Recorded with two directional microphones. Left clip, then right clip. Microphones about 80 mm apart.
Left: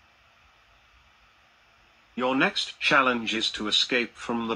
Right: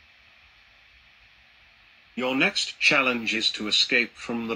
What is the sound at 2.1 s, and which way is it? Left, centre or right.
Speech, right.